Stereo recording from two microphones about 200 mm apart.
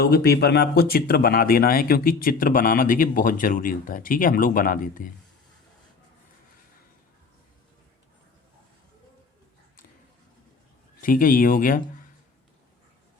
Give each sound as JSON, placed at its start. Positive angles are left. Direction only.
{"t": 0.0, "sound": "speech", "side_deg": 50}
{"t": 11.0, "sound": "speech", "side_deg": 45}